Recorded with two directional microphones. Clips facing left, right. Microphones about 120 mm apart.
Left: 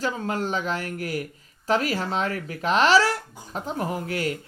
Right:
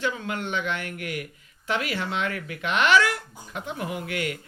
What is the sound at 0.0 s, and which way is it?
Speech, 35° left (ahead or behind).